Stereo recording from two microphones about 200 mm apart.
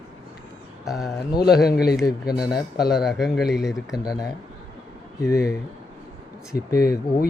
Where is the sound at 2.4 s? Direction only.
20° left (ahead or behind).